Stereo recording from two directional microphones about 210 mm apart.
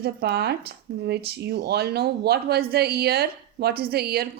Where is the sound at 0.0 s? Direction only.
50° right (ahead or behind).